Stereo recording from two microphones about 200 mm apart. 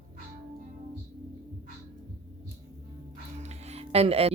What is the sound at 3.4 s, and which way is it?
Music, 35° right (ahead or behind).